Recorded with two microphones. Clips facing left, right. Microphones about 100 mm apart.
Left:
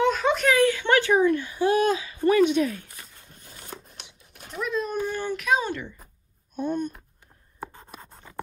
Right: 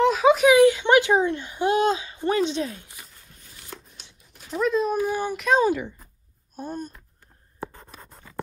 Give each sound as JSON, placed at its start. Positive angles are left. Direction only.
{"t": 0.0, "sound": "baby cry", "side_deg": -5}
{"t": 3.9, "sound": "a sound", "side_deg": 65}
{"t": 4.6, "sound": "speech", "side_deg": 0}